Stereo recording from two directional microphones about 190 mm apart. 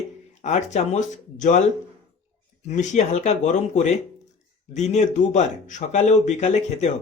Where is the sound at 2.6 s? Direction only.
40° left (ahead or behind).